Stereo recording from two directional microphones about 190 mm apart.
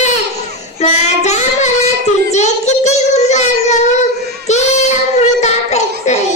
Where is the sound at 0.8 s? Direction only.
35° left (ahead or behind).